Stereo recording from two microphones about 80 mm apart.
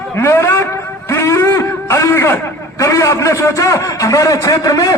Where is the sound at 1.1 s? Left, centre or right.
Left.